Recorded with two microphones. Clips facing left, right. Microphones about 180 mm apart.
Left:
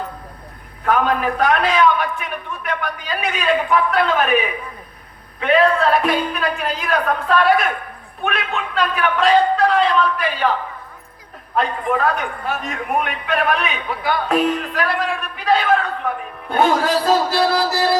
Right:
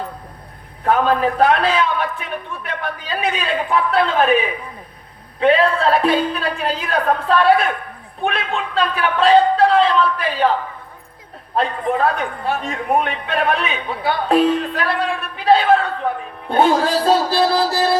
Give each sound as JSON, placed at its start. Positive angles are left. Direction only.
{"t": 0.9, "sound": "a man's voice", "side_deg": -30}
{"t": 11.5, "sound": "a man's voice", "side_deg": -30}